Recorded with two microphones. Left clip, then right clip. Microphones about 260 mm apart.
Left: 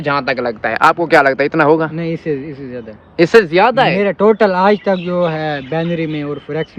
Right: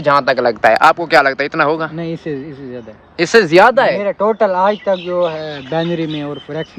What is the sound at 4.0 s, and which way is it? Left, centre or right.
Speech, left.